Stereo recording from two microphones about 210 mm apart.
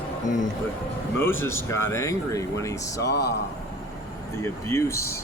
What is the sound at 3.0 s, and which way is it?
Speech, 55° left (ahead or behind).